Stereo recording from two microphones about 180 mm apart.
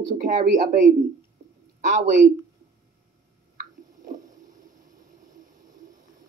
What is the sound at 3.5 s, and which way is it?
Squish, 50° right (ahead or behind).